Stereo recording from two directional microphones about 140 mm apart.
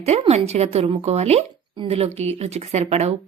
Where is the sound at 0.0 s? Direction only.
50° right (ahead or behind).